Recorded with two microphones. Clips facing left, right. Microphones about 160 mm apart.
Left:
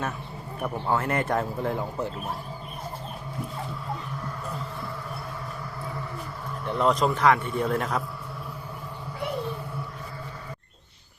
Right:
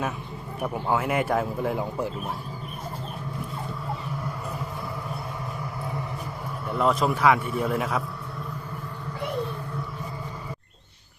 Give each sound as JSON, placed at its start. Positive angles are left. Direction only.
{"t": 0.6, "sound": "speech", "side_deg": -10}
{"t": 6.7, "sound": "a man's voice", "side_deg": -5}